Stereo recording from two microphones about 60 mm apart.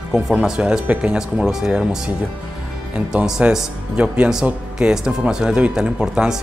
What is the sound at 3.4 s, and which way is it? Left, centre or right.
Speech, right.